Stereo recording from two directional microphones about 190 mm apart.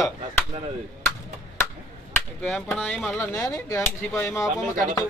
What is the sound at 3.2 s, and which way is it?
Speech, 20° left (ahead or behind).